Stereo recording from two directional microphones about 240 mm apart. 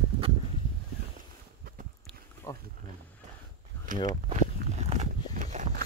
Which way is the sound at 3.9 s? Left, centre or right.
Right.